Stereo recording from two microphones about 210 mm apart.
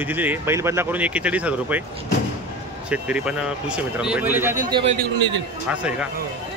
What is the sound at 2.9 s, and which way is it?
Speech, 5° right (ahead or behind).